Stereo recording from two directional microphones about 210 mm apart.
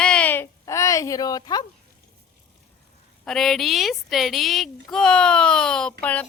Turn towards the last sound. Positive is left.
turn(degrees=5)  # may be behind; listen again after turning